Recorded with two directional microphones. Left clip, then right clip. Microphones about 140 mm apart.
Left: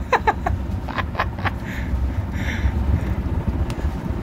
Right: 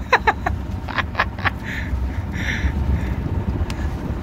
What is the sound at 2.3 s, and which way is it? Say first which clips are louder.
Vehicle: right 4 dB; 15° left (ahead or behind).